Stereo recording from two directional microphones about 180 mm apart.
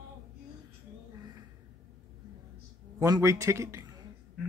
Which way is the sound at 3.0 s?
15° right (ahead or behind).